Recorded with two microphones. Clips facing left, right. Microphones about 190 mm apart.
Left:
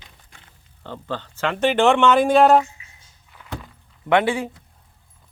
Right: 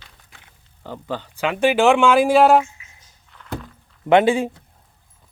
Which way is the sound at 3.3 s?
10° left (ahead or behind).